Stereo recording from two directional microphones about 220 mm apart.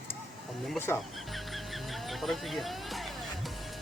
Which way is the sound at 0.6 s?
Centre (ahead or behind).